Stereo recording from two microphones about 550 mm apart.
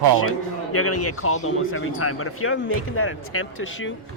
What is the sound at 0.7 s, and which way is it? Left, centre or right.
Speech, left.